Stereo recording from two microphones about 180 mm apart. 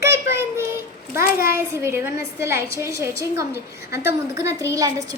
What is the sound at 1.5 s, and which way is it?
A woman's voice, 15° right (ahead or behind).